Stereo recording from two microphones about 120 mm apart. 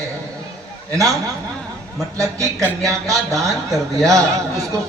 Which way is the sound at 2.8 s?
25° right (ahead or behind).